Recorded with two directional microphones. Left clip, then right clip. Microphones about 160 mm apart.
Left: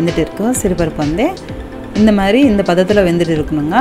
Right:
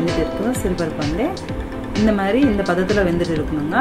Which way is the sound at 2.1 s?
50° left (ahead or behind).